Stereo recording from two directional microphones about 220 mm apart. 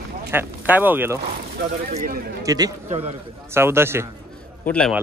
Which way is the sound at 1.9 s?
40° right (ahead or behind).